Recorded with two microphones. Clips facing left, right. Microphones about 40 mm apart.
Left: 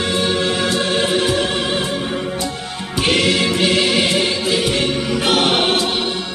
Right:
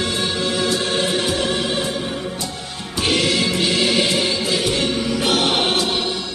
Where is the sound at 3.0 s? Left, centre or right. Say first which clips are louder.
Left 3 dB; left.